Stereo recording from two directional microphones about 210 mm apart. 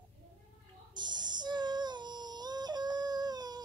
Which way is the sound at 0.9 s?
20° right (ahead or behind).